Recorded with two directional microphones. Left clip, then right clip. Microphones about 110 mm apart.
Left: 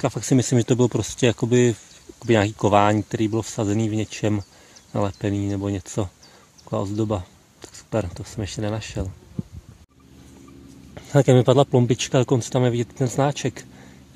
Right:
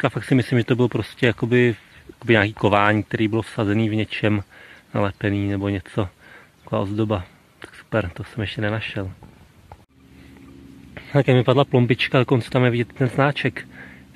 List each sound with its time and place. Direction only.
0.2 s speech: 35° left (ahead or behind)
2.2 s speech: 25° left (ahead or behind)
11.0 s speech: 45° left (ahead or behind)
11.7 s speech: 30° left (ahead or behind)